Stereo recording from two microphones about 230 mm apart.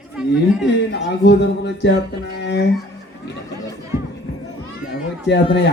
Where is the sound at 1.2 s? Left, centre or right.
Left.